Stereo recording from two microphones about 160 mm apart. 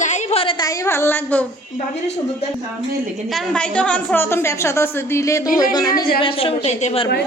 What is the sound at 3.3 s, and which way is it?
A woman's voice, 5° left (ahead or behind).